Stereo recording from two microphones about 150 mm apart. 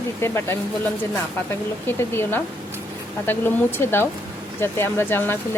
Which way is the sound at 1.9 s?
15° left (ahead or behind).